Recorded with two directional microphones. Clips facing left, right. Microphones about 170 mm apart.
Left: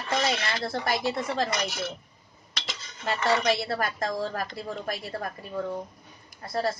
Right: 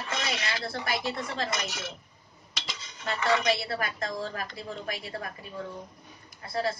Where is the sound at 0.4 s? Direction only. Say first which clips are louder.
Left 4 dB; 45° left (ahead or behind).